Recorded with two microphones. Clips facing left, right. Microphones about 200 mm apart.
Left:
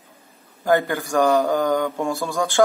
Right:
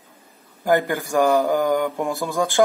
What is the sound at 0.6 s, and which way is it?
Speech, 15° right (ahead or behind).